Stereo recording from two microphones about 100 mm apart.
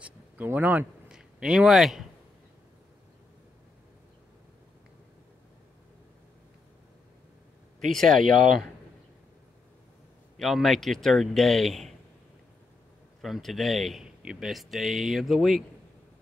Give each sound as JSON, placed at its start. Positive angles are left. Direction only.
{"t": 0.0, "sound": "a sound", "side_deg": -15}
{"t": 1.1, "sound": "a man's voice", "side_deg": -5}
{"t": 7.9, "sound": "a man's voice", "side_deg": 5}
{"t": 10.3, "sound": "a man's voice", "side_deg": 0}
{"t": 13.2, "sound": "a man's voice", "side_deg": 0}